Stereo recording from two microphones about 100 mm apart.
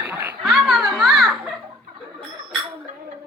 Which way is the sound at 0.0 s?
20° right (ahead or behind).